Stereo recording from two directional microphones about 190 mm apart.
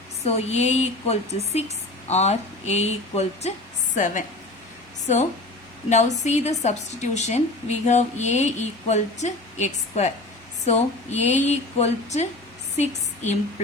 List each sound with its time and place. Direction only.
0.3 s a woman's voice: 35° left (ahead or behind)
5.9 s a woman's voice: 35° left (ahead or behind)